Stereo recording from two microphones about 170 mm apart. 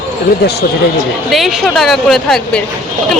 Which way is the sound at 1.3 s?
Centre (ahead or behind).